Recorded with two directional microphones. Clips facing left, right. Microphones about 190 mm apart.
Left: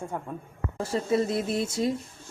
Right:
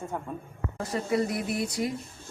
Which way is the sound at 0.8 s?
25° left (ahead or behind).